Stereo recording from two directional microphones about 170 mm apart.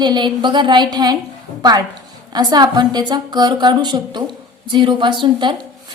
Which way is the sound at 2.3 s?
25° right (ahead or behind).